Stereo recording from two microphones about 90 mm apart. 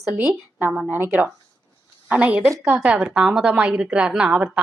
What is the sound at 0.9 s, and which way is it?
A woman's voice, 25° right (ahead or behind).